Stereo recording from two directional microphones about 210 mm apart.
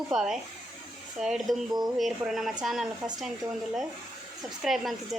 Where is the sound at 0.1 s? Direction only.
5° right (ahead or behind).